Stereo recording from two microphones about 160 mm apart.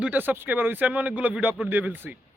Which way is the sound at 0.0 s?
10° right (ahead or behind).